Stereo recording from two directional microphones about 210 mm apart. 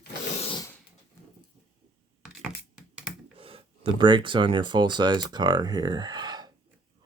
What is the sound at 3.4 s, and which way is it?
Speech, 25° right (ahead or behind).